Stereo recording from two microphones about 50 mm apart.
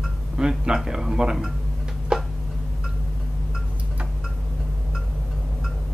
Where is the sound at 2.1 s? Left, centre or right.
Centre.